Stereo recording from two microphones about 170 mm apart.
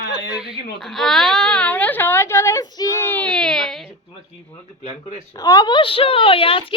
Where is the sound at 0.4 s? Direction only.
Centre (ahead or behind).